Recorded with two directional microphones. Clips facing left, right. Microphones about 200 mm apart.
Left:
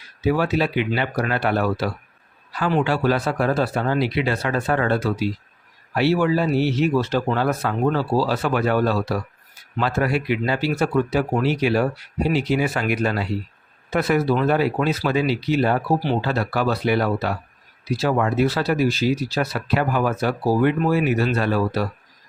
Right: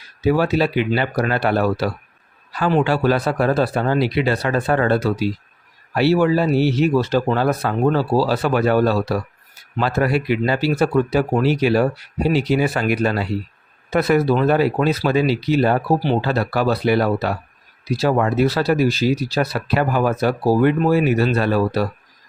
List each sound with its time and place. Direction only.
0.3 s speech: 35° right (ahead or behind)